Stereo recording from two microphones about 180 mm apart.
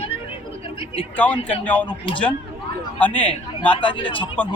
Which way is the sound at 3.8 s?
30° left (ahead or behind).